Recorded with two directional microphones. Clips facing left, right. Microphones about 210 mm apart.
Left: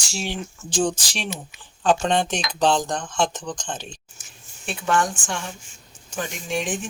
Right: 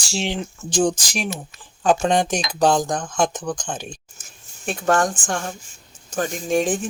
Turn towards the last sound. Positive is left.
turn(degrees=-40)  # may be behind; listen again after turning